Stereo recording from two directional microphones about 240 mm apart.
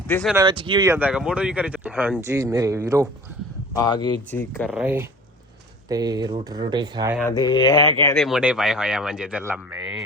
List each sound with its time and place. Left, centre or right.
0.1 s speech: centre
0.3 s speech: right
4.3 s speech: centre
4.7 s speech: centre
7.2 s speech: centre
8.1 s speech: centre